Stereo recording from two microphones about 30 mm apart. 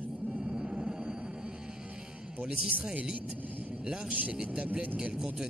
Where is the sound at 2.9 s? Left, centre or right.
Right.